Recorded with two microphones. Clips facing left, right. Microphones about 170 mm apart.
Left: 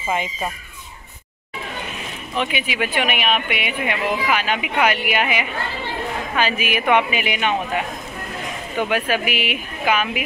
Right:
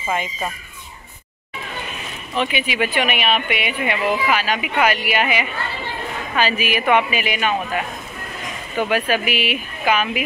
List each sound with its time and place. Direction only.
0.1 s speech: 20° left (ahead or behind)
2.3 s speech: 10° left (ahead or behind)
8.8 s speech: 10° left (ahead or behind)